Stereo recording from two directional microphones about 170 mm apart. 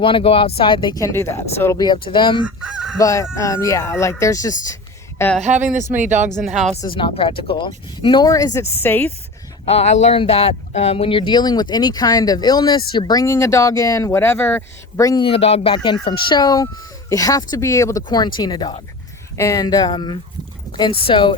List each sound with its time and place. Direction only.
0.0 s speech: 30° left (ahead or behind)
2.6 s fowl: 5° right (ahead or behind)
3.0 s speech: 20° left (ahead or behind)
4.7 s a sound: 15° left (ahead or behind)
5.4 s speech: 45° right (ahead or behind)
6.8 s speech: 30° left (ahead or behind); by 9.1 s 10° left (ahead or behind)
9.6 s speech: 40° left (ahead or behind)